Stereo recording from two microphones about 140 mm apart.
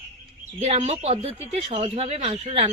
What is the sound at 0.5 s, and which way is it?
Speech, 50° right (ahead or behind).